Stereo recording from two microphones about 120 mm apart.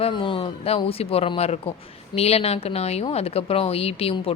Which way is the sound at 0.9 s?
55° left (ahead or behind).